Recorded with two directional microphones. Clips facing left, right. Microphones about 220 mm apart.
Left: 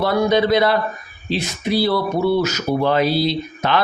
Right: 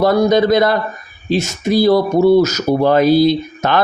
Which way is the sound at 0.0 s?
40° right (ahead or behind).